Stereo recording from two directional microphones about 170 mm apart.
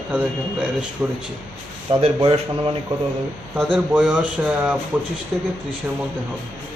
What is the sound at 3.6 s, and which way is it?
Speech, centre (ahead or behind).